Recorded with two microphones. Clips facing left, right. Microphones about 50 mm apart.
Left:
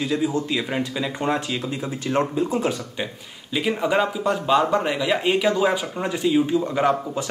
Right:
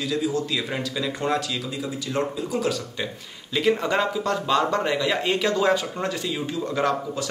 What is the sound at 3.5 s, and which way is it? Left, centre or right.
Speech, centre.